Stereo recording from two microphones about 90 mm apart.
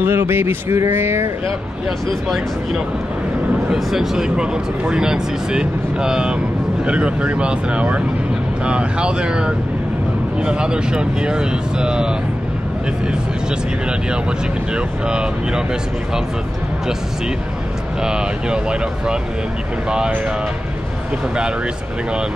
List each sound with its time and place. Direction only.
0.0 s speech: 25° right (ahead or behind)
2.2 s speech: 5° right (ahead or behind)
14.7 s speech: 10° right (ahead or behind)
18.0 s speech: 10° right (ahead or behind)